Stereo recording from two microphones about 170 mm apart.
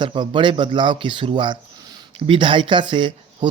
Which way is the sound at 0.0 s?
30° right (ahead or behind).